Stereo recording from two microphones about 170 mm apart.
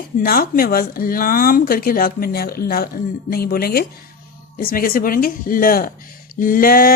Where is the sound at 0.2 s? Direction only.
60° left (ahead or behind).